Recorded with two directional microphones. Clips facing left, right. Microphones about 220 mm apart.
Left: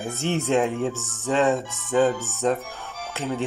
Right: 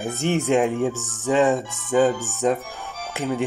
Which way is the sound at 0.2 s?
15° right (ahead or behind).